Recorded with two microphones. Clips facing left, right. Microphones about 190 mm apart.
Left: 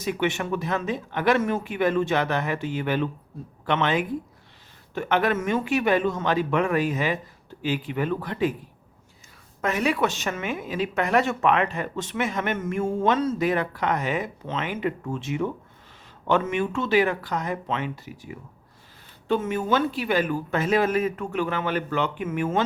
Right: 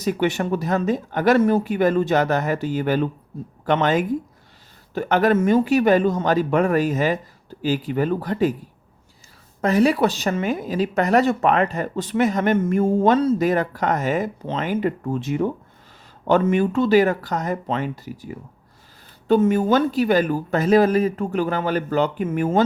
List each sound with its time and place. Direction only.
0.0 s speech: 40° right (ahead or behind)
9.6 s speech: 35° right (ahead or behind)